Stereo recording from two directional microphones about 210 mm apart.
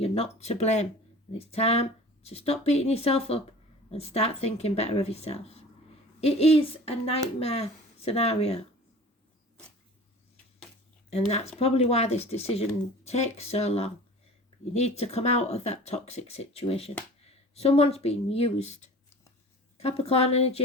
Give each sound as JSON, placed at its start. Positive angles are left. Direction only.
{"t": 0.0, "sound": "speech", "side_deg": 30}
{"t": 11.1, "sound": "speech", "side_deg": 30}